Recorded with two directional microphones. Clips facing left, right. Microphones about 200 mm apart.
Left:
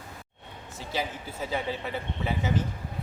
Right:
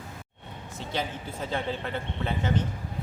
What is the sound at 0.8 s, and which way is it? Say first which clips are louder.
A man's voice: even; 5° left (ahead or behind).